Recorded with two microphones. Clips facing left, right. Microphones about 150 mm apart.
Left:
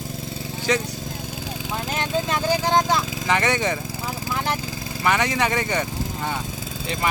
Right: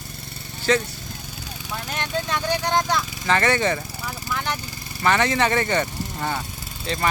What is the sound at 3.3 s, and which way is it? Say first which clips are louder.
Speech: right 2 dB; 15° left (ahead or behind).